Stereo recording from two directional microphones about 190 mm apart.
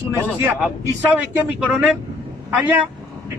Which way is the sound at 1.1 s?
5° right (ahead or behind).